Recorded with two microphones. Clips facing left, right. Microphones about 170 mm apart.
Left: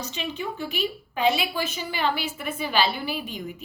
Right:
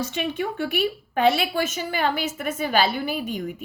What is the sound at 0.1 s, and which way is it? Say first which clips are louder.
A woman's voice: right 5 dB; 55° right (ahead or behind).